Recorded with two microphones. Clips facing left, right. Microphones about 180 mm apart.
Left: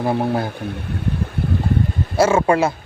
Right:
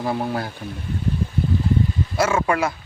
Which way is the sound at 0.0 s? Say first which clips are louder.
Left 4 dB; 25° left (ahead or behind).